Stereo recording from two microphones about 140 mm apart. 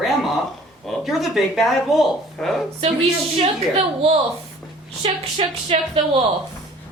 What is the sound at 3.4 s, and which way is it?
Speech, 45° right (ahead or behind).